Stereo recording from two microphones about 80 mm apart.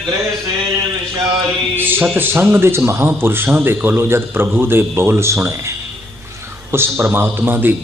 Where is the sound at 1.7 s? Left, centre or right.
Right.